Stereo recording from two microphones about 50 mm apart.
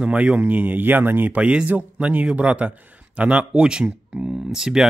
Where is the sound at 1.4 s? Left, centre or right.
Right.